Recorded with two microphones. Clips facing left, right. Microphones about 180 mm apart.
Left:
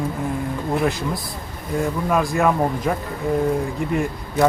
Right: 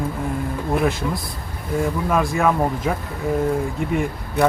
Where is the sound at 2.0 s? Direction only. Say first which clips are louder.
Left 1 dB; centre (ahead or behind).